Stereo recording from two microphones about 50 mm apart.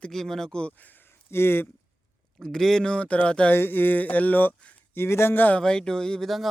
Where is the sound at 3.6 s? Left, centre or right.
Left.